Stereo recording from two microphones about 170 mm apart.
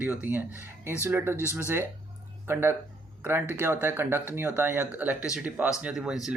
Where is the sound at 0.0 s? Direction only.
10° right (ahead or behind).